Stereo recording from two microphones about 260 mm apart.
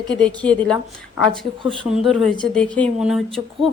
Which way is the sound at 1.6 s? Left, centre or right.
Centre.